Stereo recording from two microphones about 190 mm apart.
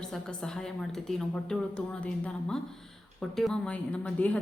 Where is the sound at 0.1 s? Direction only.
5° left (ahead or behind).